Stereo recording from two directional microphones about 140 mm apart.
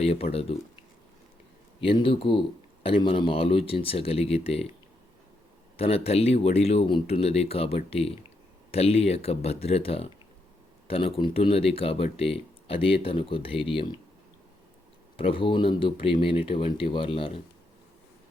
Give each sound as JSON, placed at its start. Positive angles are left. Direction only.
{"t": 0.0, "sound": "speech", "side_deg": 45}
{"t": 1.8, "sound": "speech", "side_deg": 40}
{"t": 5.7, "sound": "speech", "side_deg": 45}
{"t": 15.1, "sound": "speech", "side_deg": 40}